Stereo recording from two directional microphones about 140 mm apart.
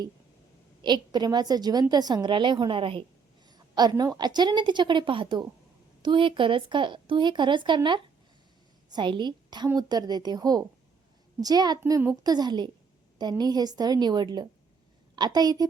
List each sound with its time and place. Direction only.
0.8 s a woman's voice: 30° right (ahead or behind)